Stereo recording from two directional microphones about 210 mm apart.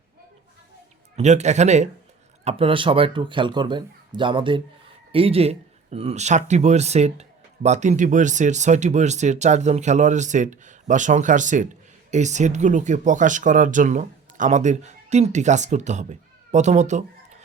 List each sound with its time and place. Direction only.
1.1 s speech: 35° right (ahead or behind)